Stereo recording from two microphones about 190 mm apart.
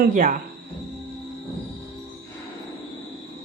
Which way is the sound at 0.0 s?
45° right (ahead or behind).